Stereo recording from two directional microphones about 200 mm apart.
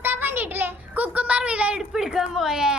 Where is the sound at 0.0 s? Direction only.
10° right (ahead or behind).